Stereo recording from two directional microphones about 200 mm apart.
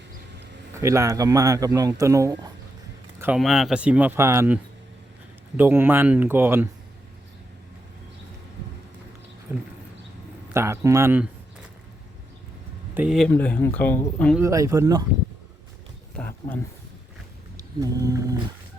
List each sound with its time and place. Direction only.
0.8 s speech: 15° right (ahead or behind)
3.2 s speech: 5° right (ahead or behind)
9.5 s speech: 10° right (ahead or behind)
12.9 s speech: 5° right (ahead or behind)
14.3 s speech: 15° right (ahead or behind)
16.1 s speech: 10° left (ahead or behind)
17.6 s roaring cats: 15° right (ahead or behind)